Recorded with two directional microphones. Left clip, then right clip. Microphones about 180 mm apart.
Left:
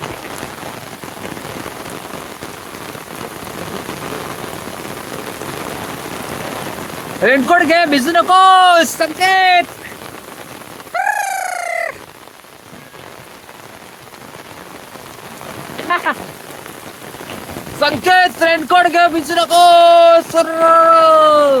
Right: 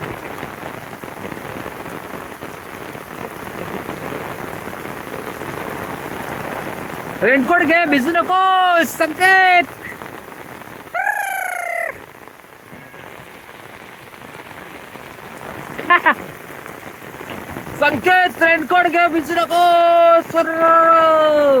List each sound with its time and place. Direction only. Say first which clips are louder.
7.2 s speech: left 3 dB; 20° left (ahead or behind)
9.0 s speech: even; centre (ahead or behind)
11.1 s a sound: left 3 dB; 20° left (ahead or behind)
11.3 s fowl: left 2 dB; 5° left (ahead or behind)
16.1 s rain on surface: right 3 dB; centre (ahead or behind)
17.7 s speech: left 2 dB; 20° left (ahead or behind)
20.9 s speech: left 4 dB; 15° left (ahead or behind)